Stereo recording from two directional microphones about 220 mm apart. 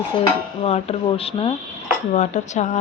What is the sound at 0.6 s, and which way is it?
Speech, 25° left (ahead or behind).